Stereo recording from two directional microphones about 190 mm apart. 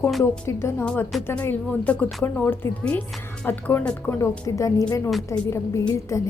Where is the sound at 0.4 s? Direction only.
10° left (ahead or behind).